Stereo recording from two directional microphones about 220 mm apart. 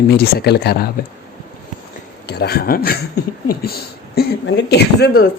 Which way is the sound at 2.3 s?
45° left (ahead or behind).